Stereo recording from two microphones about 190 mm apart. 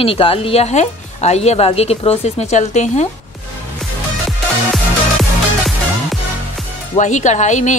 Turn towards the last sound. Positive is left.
turn(degrees=40)  # may be behind; listen again after turning